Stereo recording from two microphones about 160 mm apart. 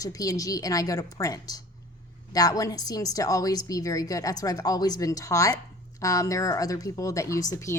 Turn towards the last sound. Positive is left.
turn(degrees=20)  # may be behind; listen again after turning